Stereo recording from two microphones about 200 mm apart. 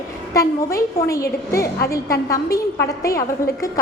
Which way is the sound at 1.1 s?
15° left (ahead or behind).